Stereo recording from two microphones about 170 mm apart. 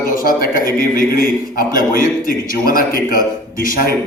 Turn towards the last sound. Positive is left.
turn(degrees=60)  # may be behind; listen again after turning